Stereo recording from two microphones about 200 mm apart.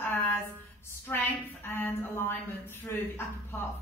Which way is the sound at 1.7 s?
10° left (ahead or behind).